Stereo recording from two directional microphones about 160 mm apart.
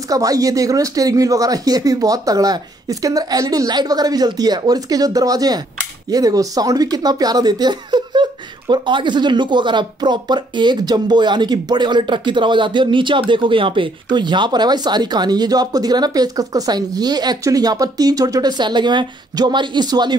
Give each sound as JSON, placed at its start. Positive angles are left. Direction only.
{"t": 0.1, "sound": "speech", "side_deg": -20}